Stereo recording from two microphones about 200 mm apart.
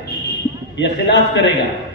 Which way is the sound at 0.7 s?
60° left (ahead or behind).